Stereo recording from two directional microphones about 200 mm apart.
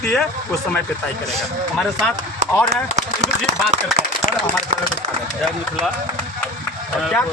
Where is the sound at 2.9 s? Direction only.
35° right (ahead or behind).